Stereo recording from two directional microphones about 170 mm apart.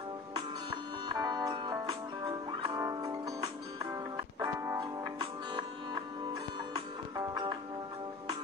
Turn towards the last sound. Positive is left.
turn(degrees=-25)  # may be behind; listen again after turning